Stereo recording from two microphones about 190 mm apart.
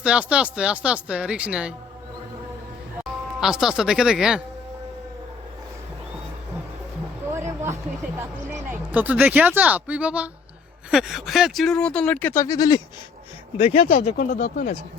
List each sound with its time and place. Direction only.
0.0 s speech: 5° right (ahead or behind)
3.0 s speech: 5° right (ahead or behind)
7.3 s a sound: 15° right (ahead or behind)
8.2 s speech: 10° right (ahead or behind); by 12.8 s 20° left (ahead or behind)
13.6 s speech: 35° left (ahead or behind)
14.0 s speech: 45° left (ahead or behind)